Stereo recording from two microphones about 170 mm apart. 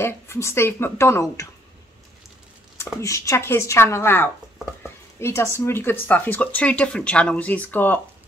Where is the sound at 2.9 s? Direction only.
20° left (ahead or behind).